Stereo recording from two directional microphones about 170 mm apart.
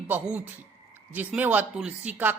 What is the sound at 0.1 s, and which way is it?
Speech, 10° right (ahead or behind).